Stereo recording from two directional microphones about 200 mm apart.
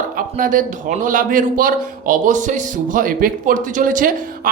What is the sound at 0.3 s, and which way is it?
A man's voice, 40° right (ahead or behind).